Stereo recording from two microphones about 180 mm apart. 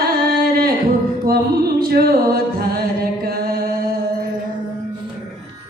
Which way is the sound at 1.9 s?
60° right (ahead or behind).